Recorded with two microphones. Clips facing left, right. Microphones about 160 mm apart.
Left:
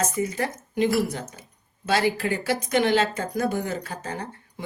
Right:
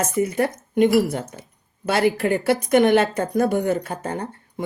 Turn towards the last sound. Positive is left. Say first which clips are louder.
# right 5 dB
turn(degrees=-55)  # may be behind; listen again after turning